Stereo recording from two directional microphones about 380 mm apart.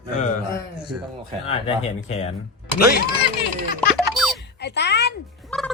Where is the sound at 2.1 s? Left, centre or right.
Centre.